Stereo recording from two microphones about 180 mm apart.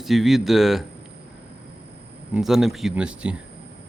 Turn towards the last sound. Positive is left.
turn(degrees=-5)  # may be behind; listen again after turning